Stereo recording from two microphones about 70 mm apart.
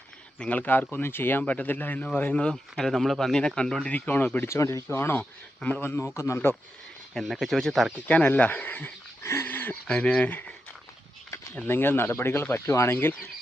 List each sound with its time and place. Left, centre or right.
0.3 s speech: left
2.3 s speech: centre
4.4 s speech: left
4.9 s speech: left
6.1 s speech: left
7.1 s speech: centre
8.0 s speech: centre
9.2 s a sound: left
9.5 s a sound: left
9.8 s speech: centre
11.7 s speech: left